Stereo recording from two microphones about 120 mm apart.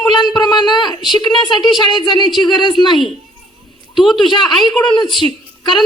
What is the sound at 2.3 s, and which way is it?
Speech, centre (ahead or behind).